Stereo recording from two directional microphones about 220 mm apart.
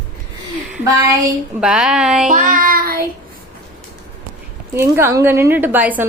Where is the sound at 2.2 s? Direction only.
35° right (ahead or behind).